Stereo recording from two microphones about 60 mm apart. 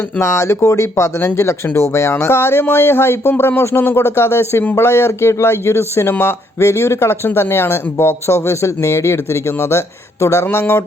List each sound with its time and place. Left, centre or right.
0.2 s speech: left